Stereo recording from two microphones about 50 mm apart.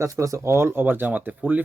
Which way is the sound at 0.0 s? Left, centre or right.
Right.